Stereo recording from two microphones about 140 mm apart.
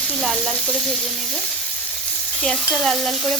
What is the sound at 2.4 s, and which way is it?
Sizzle, 5° left (ahead or behind).